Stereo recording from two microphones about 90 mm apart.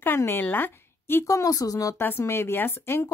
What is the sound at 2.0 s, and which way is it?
Speech, 25° left (ahead or behind).